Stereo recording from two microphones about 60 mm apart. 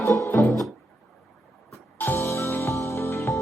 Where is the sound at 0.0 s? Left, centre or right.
Left.